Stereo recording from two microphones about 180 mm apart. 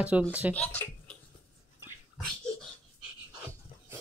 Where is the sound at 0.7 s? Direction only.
10° left (ahead or behind).